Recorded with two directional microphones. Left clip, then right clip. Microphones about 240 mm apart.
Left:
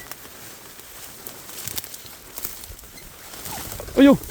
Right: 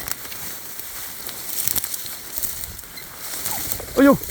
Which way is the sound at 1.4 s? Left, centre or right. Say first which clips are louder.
Right 6 dB; right.